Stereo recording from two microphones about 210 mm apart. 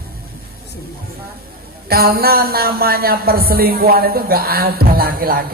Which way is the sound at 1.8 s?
45° right (ahead or behind).